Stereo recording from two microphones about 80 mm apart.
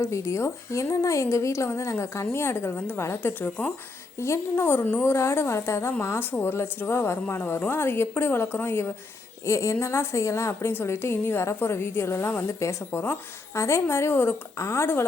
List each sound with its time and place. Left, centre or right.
0.0 s a woman's voice: left